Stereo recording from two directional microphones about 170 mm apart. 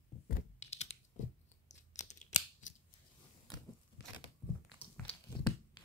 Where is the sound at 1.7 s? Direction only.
45° left (ahead or behind).